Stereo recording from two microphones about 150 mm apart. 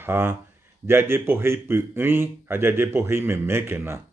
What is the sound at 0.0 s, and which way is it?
Speech, 15° right (ahead or behind).